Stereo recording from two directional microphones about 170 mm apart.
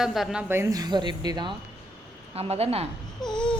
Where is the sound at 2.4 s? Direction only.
35° right (ahead or behind).